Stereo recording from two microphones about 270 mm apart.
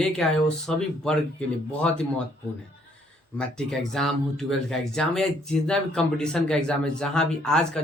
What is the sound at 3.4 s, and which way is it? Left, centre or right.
Speech, centre.